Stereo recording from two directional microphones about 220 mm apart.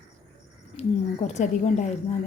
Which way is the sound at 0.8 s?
30° left (ahead or behind).